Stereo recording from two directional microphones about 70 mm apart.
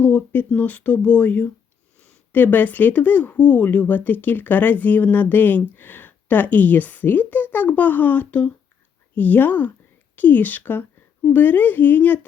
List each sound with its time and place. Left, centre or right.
0.0 s speech: left